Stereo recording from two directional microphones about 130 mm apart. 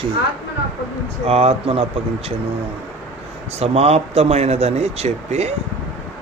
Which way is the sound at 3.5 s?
50° right (ahead or behind).